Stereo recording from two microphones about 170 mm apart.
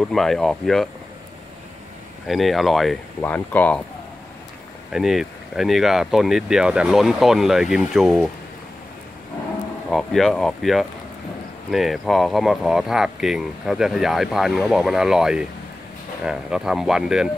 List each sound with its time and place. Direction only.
0.0 s speech: centre (ahead or behind)
2.2 s speech: centre (ahead or behind)
4.9 s speech: 5° right (ahead or behind)
9.8 s speech: centre (ahead or behind)